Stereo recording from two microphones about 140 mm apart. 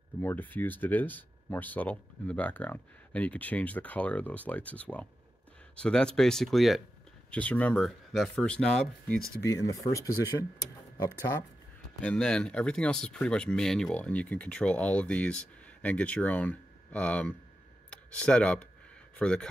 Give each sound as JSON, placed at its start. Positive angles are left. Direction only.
{"t": 0.2, "sound": "speech", "side_deg": 15}
{"t": 9.4, "sound": "speech", "side_deg": 20}
{"t": 12.0, "sound": "speech", "side_deg": 5}